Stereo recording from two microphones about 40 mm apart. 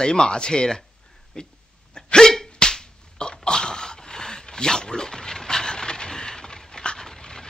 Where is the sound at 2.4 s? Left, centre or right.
Centre.